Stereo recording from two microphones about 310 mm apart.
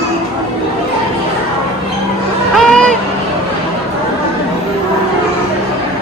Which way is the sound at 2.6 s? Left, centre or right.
Centre.